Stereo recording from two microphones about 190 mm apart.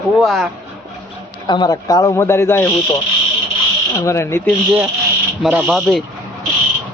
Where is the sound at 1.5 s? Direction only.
25° left (ahead or behind).